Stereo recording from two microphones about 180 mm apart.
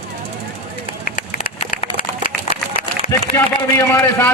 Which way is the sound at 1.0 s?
45° left (ahead or behind).